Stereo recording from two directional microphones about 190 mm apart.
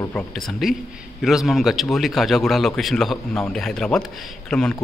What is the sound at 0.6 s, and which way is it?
A man's voice, centre (ahead or behind).